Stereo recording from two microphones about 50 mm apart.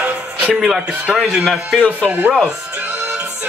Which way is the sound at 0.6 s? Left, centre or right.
Centre.